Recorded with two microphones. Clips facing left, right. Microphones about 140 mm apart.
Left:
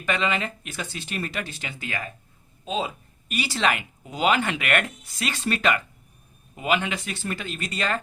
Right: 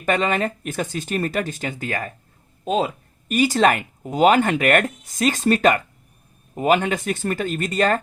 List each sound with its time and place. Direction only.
0.0 s speech: 45° right (ahead or behind)